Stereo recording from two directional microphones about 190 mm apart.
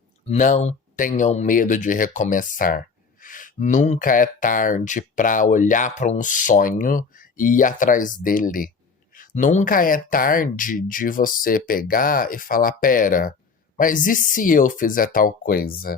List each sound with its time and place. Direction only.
0.3 s speech: 40° left (ahead or behind)